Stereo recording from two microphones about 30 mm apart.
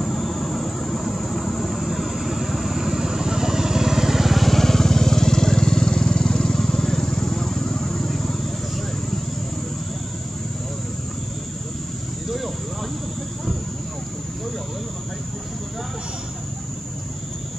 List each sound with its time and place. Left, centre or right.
0.0 s vehicle: centre